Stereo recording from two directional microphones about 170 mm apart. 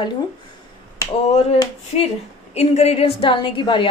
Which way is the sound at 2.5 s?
40° left (ahead or behind).